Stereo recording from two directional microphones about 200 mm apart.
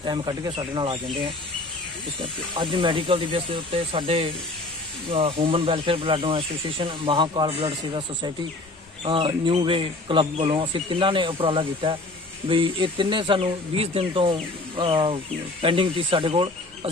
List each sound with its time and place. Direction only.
0.0 s speech: 20° right (ahead or behind)